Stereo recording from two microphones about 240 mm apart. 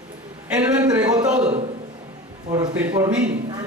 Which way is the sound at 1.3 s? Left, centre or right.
Right.